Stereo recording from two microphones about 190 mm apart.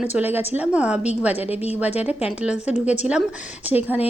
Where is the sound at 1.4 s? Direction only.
30° left (ahead or behind).